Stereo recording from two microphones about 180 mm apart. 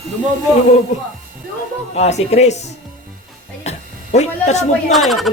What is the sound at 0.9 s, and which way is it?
Speech, 40° left (ahead or behind).